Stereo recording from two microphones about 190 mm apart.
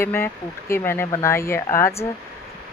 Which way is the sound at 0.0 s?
15° left (ahead or behind).